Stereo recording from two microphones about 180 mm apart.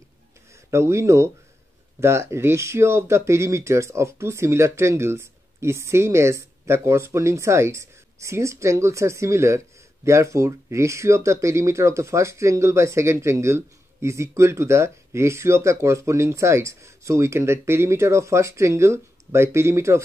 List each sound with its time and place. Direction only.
0.7 s speech: 15° right (ahead or behind)